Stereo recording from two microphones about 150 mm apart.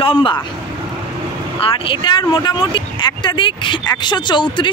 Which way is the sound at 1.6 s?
35° left (ahead or behind).